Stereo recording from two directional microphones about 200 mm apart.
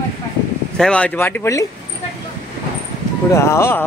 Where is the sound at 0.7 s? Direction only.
5° left (ahead or behind).